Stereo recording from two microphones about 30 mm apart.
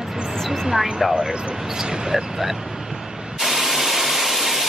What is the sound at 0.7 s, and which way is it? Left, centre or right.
Speech, centre.